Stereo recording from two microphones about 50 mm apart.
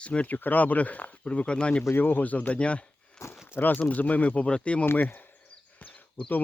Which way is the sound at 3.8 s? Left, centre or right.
Left.